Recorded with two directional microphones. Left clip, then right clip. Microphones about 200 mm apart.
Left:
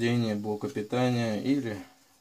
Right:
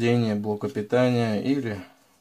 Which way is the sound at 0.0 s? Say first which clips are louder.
Right 5 dB; 30° right (ahead or behind).